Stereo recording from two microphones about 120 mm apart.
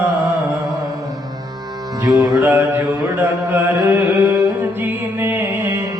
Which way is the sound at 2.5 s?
15° right (ahead or behind).